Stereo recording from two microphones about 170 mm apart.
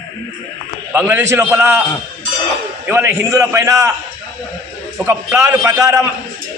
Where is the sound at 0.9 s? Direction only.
10° right (ahead or behind).